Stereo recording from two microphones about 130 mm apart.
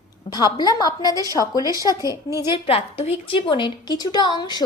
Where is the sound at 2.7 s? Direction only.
50° left (ahead or behind); by 4.6 s 35° left (ahead or behind).